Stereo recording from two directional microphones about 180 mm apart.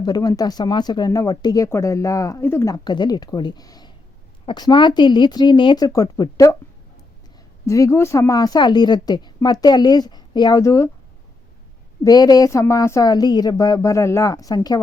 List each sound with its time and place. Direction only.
0.0 s speech: 20° left (ahead or behind)
7.7 s speech: 15° left (ahead or behind)
12.0 s speech: 20° left (ahead or behind)